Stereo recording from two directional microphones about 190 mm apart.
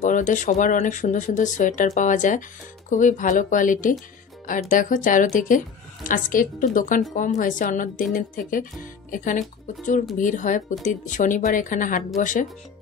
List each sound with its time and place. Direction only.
0.0 s speech: 40° left (ahead or behind)